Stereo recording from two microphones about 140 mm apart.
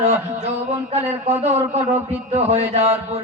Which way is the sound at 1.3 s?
50° right (ahead or behind).